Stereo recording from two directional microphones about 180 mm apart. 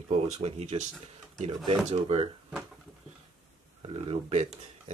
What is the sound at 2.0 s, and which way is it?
Speech, 35° right (ahead or behind).